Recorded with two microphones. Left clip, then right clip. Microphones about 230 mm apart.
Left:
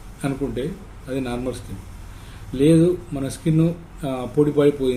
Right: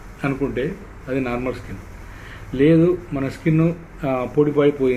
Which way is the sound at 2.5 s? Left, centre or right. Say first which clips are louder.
Right 1 dB; centre.